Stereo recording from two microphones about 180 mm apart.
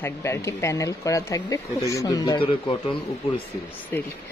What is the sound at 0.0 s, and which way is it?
Speech, 15° left (ahead or behind).